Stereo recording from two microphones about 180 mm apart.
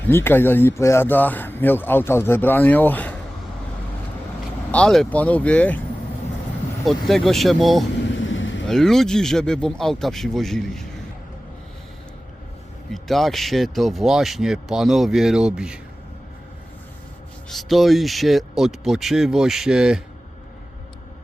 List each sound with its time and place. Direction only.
0.1 s speech: 10° left (ahead or behind)
4.7 s speech: 5° left (ahead or behind)
6.8 s speech: centre (ahead or behind)
8.0 s vehicle: 90° left
8.6 s speech: centre (ahead or behind)
12.9 s speech: centre (ahead or behind)
17.5 s speech: centre (ahead or behind)